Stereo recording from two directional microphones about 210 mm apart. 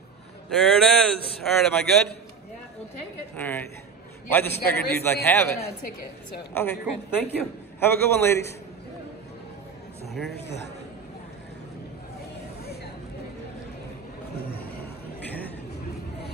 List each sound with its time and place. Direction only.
0.5 s speech: 5° left (ahead or behind)
3.3 s a man's voice: 10° left (ahead or behind)
6.5 s a man's voice: 10° left (ahead or behind)
10.3 s speech: 50° left (ahead or behind)